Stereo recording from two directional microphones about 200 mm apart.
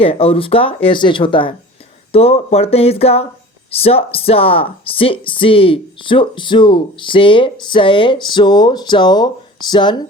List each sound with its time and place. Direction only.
0.0 s speech: 30° left (ahead or behind)